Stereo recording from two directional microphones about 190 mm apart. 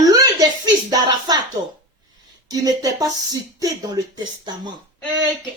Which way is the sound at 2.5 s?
20° right (ahead or behind).